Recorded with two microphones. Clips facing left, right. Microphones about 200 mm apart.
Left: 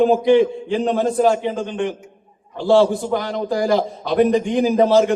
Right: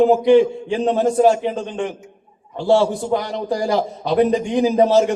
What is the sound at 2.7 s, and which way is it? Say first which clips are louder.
A man's voice: left 1 dB; 20° right (ahead or behind).